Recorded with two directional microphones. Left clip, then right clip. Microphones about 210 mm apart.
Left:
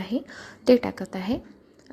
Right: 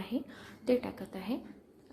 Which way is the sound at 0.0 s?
30° left (ahead or behind).